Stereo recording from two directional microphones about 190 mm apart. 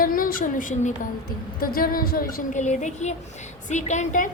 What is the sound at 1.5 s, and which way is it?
A woman's voice, 50° left (ahead or behind).